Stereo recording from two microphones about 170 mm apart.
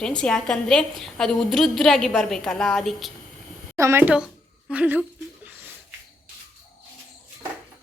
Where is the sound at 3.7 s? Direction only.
15° right (ahead or behind).